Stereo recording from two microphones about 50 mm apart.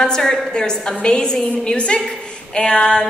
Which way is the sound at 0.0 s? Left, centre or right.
Centre.